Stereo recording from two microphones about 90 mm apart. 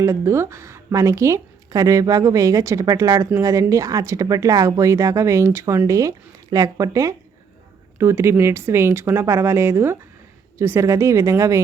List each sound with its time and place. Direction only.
0.0 s speech: 30° right (ahead or behind)